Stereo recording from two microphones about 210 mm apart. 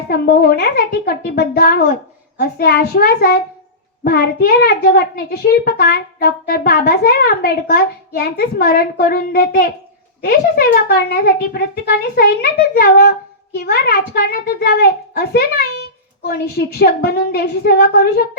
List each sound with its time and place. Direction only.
0.1 s a child's voice: 45° left (ahead or behind)